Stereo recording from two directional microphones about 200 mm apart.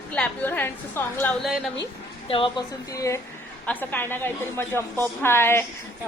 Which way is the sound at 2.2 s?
25° left (ahead or behind).